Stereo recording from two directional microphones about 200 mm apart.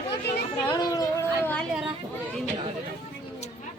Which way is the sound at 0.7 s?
20° left (ahead or behind).